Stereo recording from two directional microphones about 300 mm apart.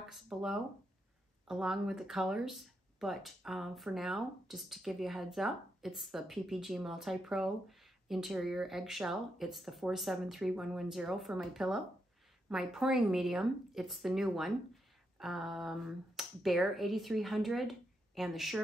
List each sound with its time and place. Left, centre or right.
0.1 s speech: centre